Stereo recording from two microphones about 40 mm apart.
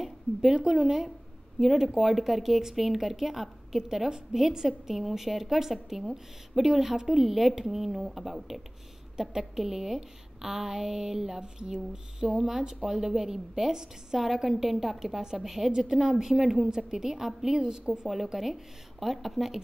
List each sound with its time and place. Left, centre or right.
0.0 s a sound: centre
0.7 s a woman's voice: centre
17.6 s a woman's voice: centre
18.0 s a woman's voice: centre